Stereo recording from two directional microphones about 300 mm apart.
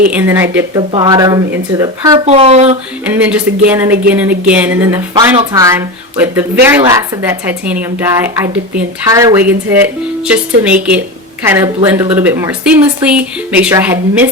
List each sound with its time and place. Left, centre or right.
0.1 s speech: centre
3.0 s speech: centre